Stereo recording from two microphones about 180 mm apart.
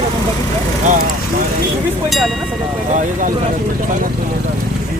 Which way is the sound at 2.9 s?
45° right (ahead or behind).